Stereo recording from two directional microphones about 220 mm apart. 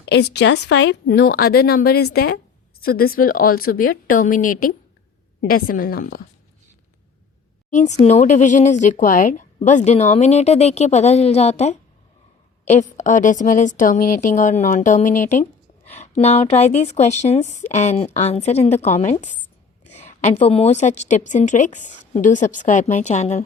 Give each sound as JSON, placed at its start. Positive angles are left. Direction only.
{"t": 0.0, "sound": "speech", "side_deg": 50}
{"t": 7.7, "sound": "speech", "side_deg": 30}
{"t": 13.0, "sound": "a woman's voice", "side_deg": 35}